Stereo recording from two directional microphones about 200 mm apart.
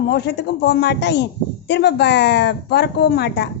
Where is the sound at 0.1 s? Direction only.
55° left (ahead or behind).